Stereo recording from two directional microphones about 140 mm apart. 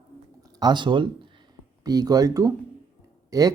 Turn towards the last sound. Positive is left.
turn(degrees=-25)  # may be behind; listen again after turning